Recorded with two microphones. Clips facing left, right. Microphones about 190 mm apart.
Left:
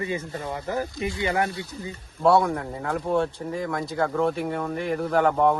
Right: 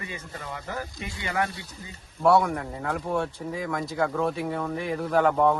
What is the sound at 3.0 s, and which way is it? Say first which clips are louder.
Speech: left 5 dB; 20° left (ahead or behind).